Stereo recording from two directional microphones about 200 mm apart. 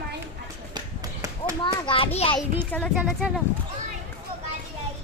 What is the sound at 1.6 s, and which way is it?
Speech, 25° left (ahead or behind).